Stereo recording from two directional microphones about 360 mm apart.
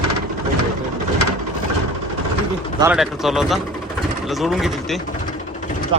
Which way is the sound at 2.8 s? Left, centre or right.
Centre.